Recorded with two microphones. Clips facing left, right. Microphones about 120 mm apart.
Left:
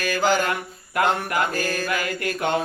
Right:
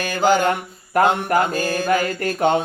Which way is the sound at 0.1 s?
20° right (ahead or behind).